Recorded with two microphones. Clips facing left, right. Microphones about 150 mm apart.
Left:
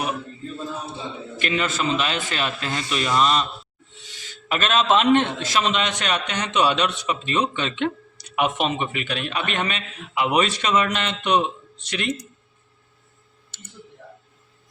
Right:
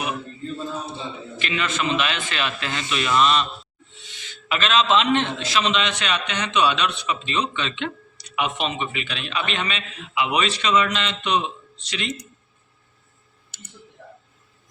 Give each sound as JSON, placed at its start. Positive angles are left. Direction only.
{"t": 1.4, "sound": "a man's voice", "side_deg": 40}